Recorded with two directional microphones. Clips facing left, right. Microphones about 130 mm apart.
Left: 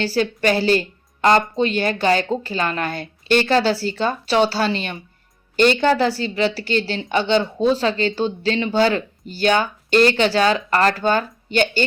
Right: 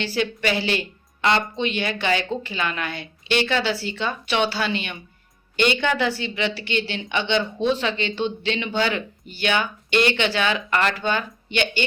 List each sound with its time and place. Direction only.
0.0 s a woman's voice: 40° left (ahead or behind)